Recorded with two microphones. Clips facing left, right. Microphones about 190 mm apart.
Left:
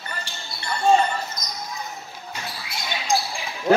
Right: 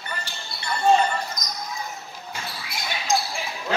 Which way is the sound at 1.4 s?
10° left (ahead or behind).